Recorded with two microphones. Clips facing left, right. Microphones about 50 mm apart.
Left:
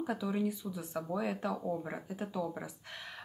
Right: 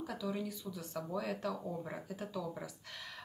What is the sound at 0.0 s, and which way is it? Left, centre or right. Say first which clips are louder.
Speech: left 5 dB; left.